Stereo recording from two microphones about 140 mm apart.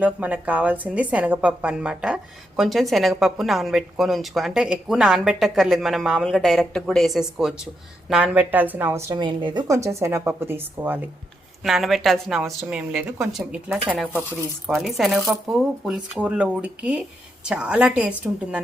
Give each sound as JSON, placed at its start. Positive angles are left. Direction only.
{"t": 0.0, "sound": "a woman's voice", "side_deg": -10}
{"t": 9.1, "sound": "speech", "side_deg": -35}
{"t": 9.6, "sound": "speech", "side_deg": -20}
{"t": 11.6, "sound": "a woman's voice", "side_deg": 0}
{"t": 14.1, "sound": "speech", "side_deg": 15}
{"t": 14.7, "sound": "a woman's voice", "side_deg": 0}